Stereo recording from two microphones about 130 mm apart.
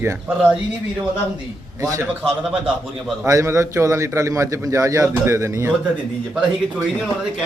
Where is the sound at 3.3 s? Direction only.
25° right (ahead or behind).